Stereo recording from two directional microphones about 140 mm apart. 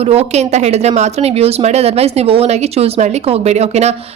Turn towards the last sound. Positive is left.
turn(degrees=-50)  # may be behind; listen again after turning